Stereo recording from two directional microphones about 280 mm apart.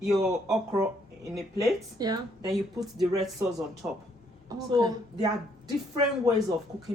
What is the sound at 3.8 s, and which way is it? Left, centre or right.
A woman's voice, centre.